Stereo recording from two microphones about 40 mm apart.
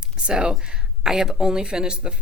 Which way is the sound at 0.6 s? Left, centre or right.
Right.